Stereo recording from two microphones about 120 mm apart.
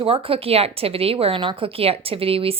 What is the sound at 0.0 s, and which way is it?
A woman's voice, 50° right (ahead or behind).